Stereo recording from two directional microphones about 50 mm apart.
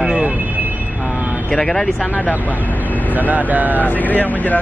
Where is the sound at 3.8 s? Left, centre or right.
Left.